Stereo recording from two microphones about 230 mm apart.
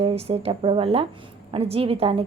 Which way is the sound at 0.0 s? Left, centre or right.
Right.